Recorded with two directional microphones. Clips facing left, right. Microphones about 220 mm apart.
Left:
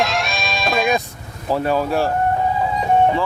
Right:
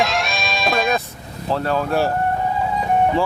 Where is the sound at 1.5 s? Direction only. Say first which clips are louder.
Left 2 dB; 10° left (ahead or behind).